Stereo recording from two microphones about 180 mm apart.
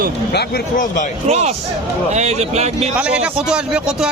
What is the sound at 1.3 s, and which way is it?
A man's voice, 35° right (ahead or behind).